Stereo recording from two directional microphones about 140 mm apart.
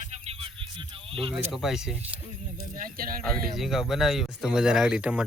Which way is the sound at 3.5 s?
Centre (ahead or behind).